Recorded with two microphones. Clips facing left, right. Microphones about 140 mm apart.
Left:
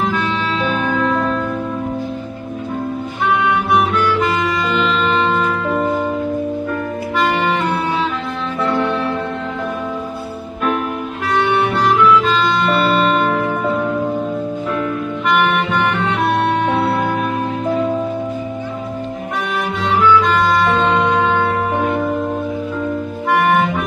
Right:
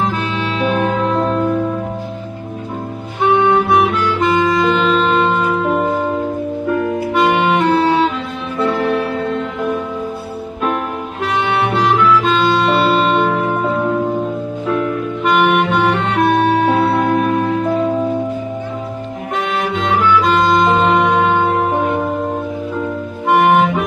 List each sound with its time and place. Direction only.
0.7 s music: 35° right (ahead or behind)
3.3 s music: 30° right (ahead or behind)
7.2 s music: 15° right (ahead or behind)
12.6 s music: 20° right (ahead or behind)
15.2 s saxophone: 15° right (ahead or behind)
20.2 s music: 20° right (ahead or behind)
23.2 s clarinet: 20° right (ahead or behind)